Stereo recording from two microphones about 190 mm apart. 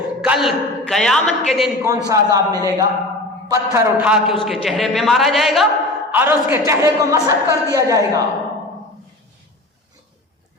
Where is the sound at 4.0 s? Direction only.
5° right (ahead or behind).